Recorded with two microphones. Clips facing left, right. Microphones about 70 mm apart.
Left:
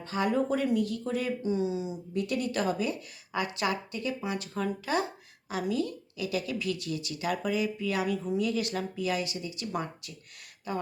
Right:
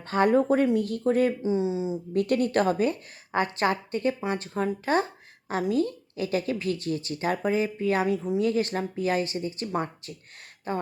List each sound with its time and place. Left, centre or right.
0.0 s speech: right
1.4 s speech: right
2.1 s a woman's voice: right